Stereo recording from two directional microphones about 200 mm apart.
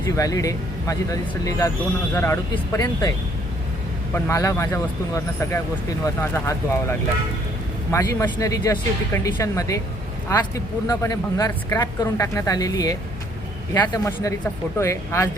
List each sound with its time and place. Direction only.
0.2 s speech: 15° left (ahead or behind)
4.1 s speech: 15° left (ahead or behind)